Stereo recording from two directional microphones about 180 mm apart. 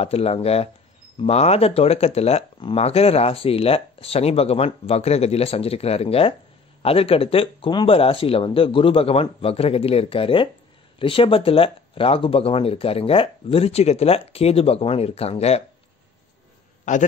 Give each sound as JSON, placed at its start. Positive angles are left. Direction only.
{"t": 0.0, "sound": "speech", "side_deg": 35}
{"t": 16.9, "sound": "a man's voice", "side_deg": 45}